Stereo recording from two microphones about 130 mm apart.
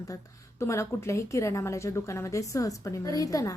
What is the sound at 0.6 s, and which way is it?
A woman's voice, 20° left (ahead or behind).